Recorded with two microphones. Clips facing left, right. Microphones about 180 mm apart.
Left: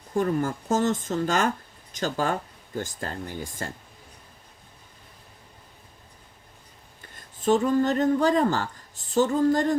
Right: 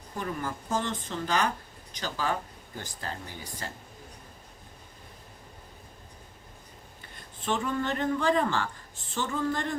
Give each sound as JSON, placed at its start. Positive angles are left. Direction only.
{"t": 0.1, "sound": "speech", "side_deg": 45}
{"t": 7.0, "sound": "speech", "side_deg": 40}